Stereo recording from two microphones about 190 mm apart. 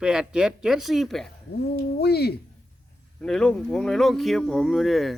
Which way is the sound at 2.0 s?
55° left (ahead or behind).